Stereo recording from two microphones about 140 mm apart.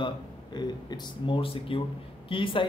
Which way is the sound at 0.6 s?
35° left (ahead or behind).